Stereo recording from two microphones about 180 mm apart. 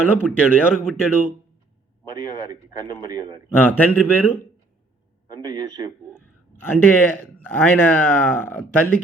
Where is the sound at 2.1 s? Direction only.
25° right (ahead or behind).